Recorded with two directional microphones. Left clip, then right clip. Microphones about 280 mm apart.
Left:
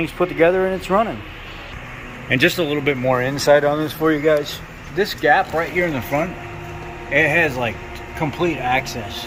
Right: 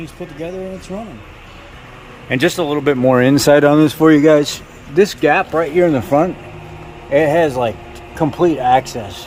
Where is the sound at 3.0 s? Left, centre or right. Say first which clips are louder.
Right 5 dB; right.